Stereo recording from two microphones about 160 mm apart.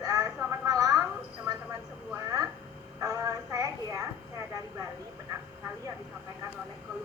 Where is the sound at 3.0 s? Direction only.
20° right (ahead or behind).